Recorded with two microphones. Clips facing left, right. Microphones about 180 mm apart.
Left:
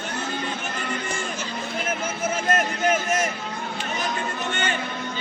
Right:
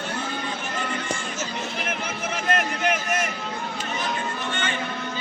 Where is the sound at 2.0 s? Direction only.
45° left (ahead or behind).